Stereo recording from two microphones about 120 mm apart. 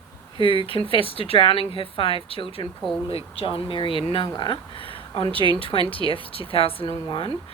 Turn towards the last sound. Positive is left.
turn(degrees=50)  # may be behind; listen again after turning